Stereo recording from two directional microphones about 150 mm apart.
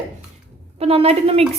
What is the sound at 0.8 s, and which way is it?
Speech, 40° right (ahead or behind).